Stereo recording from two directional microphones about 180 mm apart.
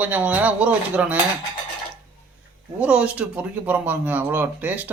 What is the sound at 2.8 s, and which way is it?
Speech, 5° right (ahead or behind).